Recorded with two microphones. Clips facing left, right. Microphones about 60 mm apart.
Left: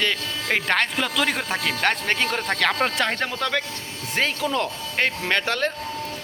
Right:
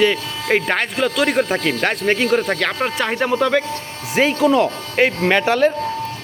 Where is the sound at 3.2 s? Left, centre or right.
Centre.